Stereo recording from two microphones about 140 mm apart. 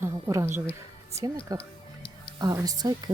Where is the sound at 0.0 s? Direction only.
20° right (ahead or behind).